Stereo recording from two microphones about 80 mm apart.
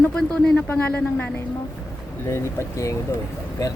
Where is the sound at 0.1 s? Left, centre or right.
Centre.